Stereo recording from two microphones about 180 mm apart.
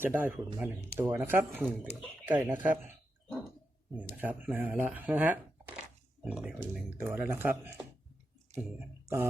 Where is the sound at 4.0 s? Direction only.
10° right (ahead or behind).